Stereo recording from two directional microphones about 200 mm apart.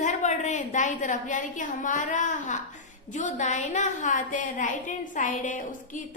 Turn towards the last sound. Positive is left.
turn(degrees=40)  # may be behind; listen again after turning